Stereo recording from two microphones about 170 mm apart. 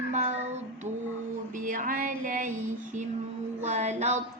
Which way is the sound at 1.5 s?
50° right (ahead or behind).